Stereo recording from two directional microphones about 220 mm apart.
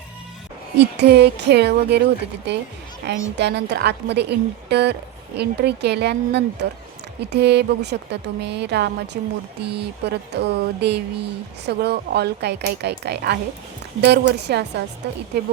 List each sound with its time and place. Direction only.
0.8 s speech: 50° right (ahead or behind)